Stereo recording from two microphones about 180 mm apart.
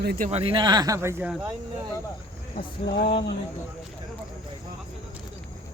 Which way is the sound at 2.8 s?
25° left (ahead or behind).